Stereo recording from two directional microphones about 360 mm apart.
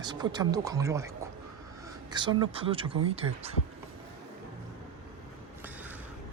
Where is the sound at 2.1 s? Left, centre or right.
Centre.